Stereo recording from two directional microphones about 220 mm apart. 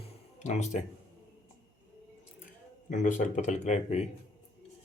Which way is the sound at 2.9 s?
35° left (ahead or behind).